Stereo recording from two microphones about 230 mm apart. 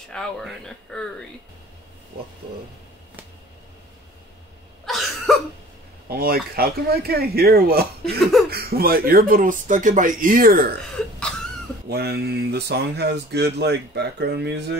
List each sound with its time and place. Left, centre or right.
0.1 s speech: centre
4.8 s cough: centre
6.0 s speech: right
11.9 s speech: right